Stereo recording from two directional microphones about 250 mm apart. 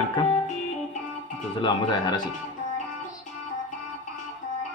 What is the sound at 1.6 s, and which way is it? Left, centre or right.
Speech, centre.